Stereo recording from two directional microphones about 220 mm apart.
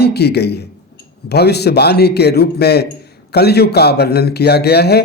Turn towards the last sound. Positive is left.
turn(degrees=45)  # may be behind; listen again after turning